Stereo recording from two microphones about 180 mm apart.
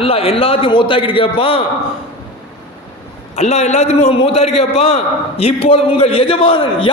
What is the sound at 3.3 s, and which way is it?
A man's voice, 40° left (ahead or behind).